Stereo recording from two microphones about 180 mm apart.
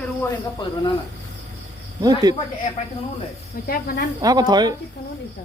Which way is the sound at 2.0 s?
20° right (ahead or behind).